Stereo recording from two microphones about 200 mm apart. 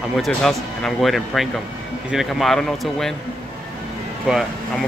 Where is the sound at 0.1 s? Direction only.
Centre (ahead or behind).